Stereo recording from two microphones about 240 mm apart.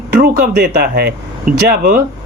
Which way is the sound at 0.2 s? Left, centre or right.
Right.